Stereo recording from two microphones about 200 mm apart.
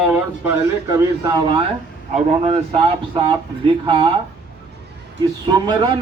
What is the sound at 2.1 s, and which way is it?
Speech, 30° right (ahead or behind).